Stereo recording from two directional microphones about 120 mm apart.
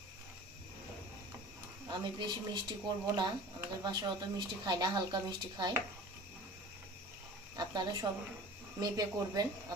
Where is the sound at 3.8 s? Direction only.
35° right (ahead or behind).